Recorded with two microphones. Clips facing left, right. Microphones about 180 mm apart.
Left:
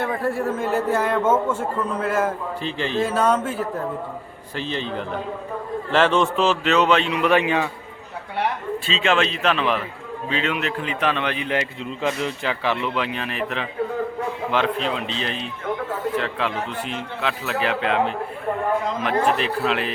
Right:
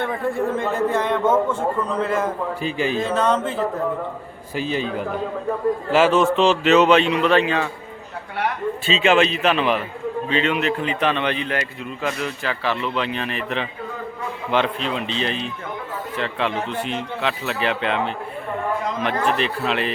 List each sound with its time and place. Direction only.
0.0 s a man's voice: 5° left (ahead or behind)
2.6 s a man's voice: 10° right (ahead or behind)
3.0 s a man's voice: 10° left (ahead or behind)
4.5 s a man's voice: 10° right (ahead or behind)
7.2 s a man's voice: 15° left (ahead or behind)
8.9 s speech: 5° right (ahead or behind)
11.4 s a man's voice: 20° left (ahead or behind); by 18.1 s 5° left (ahead or behind)
19.4 s speech: centre (ahead or behind)